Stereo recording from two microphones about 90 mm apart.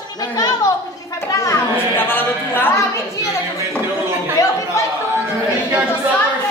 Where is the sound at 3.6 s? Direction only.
30° right (ahead or behind).